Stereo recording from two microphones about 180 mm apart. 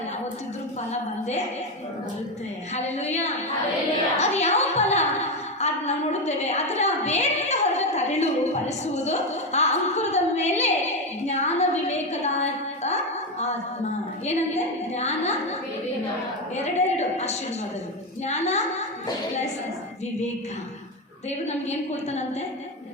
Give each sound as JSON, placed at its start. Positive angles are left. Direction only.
{"t": 2.7, "sound": "a woman's voice", "side_deg": 40}
{"t": 14.3, "sound": "a woman's voice", "side_deg": 40}
{"t": 16.7, "sound": "a woman's voice", "side_deg": 40}
{"t": 21.2, "sound": "a woman's voice", "side_deg": 40}